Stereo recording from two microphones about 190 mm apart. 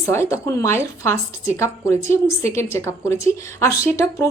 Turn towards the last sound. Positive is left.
turn(degrees=15)  # may be behind; listen again after turning